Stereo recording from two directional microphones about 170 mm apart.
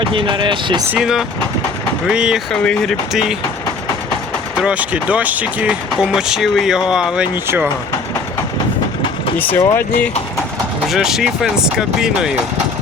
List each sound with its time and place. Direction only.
0.0 s speech: 30° right (ahead or behind)
0.9 s speech: 5° right (ahead or behind)
4.6 s speech: 10° right (ahead or behind)
9.4 s speech: 15° left (ahead or behind)
10.8 s speech: centre (ahead or behind)